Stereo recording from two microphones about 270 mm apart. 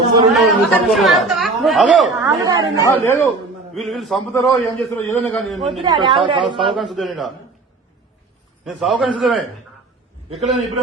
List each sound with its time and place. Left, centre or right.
0.3 s speech: centre
2.8 s a man's voice: centre
5.8 s a woman's voice: centre
6.7 s a man's voice: centre
8.6 s a man's voice: centre
10.2 s a man's voice: right